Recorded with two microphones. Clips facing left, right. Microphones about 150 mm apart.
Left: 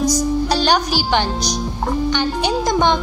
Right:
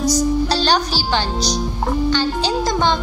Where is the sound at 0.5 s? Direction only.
15° left (ahead or behind).